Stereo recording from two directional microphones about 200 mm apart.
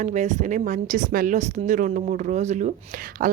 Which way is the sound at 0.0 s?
35° right (ahead or behind).